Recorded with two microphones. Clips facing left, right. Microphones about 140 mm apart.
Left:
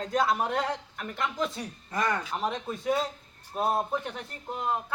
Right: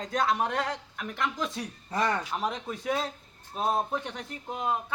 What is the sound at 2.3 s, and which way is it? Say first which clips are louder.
A man's voice: left 1 dB; centre (ahead or behind).